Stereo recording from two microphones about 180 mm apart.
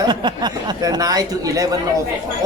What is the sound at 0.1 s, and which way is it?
Speech, 25° right (ahead or behind).